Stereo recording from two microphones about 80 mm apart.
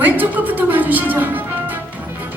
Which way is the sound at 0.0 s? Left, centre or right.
Right.